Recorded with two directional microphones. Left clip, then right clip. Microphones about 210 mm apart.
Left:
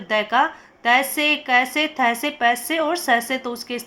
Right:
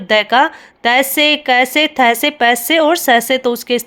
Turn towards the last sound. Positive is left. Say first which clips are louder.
# right 11 dB
turn(degrees=-55)  # may be behind; listen again after turning